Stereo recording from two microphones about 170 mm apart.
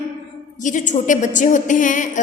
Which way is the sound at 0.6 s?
45° left (ahead or behind).